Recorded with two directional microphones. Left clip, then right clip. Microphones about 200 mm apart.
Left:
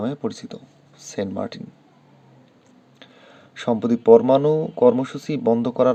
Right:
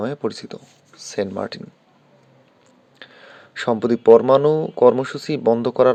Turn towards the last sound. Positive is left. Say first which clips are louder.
# right 3 dB
turn(degrees=-20)  # may be behind; listen again after turning